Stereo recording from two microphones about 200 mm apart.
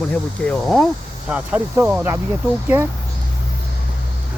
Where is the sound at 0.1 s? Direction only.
5° left (ahead or behind).